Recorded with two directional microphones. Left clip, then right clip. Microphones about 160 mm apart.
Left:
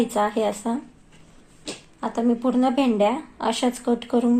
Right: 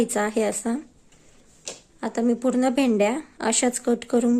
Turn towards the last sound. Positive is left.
turn(degrees=-65)  # may be behind; listen again after turning